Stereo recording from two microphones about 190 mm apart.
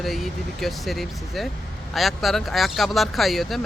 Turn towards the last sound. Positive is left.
turn(degrees=0)  # may be behind; listen again after turning